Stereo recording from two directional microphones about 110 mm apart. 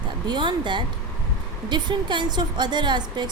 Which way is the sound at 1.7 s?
45° right (ahead or behind).